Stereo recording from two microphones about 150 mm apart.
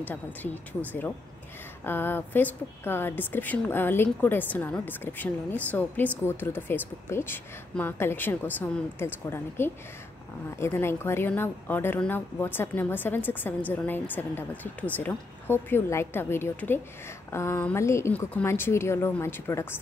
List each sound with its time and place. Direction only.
0.0 s a woman's voice: 10° left (ahead or behind)